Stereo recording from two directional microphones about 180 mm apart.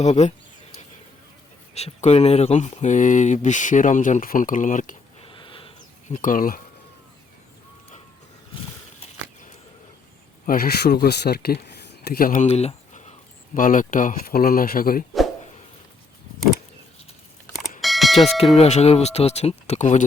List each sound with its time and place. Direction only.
0.0 s speech: 40° left (ahead or behind)
1.7 s speech: 35° left (ahead or behind)
5.2 s a sound: 30° left (ahead or behind)
6.1 s speech: 50° left (ahead or behind)
10.4 s speech: 50° left (ahead or behind)
17.5 s bell: centre (ahead or behind)
18.5 s speech: 35° left (ahead or behind)